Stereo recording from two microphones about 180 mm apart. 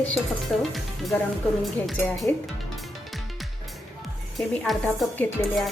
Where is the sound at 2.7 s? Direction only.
Centre (ahead or behind).